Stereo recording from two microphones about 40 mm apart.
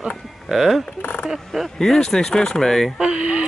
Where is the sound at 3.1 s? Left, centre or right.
Right.